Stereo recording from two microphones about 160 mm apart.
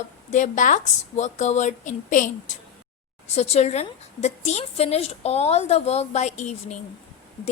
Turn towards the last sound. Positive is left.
turn(degrees=45)  # may be behind; listen again after turning